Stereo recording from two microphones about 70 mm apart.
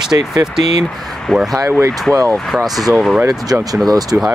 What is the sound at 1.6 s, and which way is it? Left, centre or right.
Speech, right.